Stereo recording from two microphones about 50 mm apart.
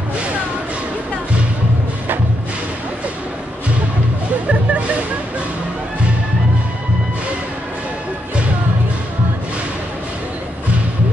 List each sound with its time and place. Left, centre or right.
4.5 s music: right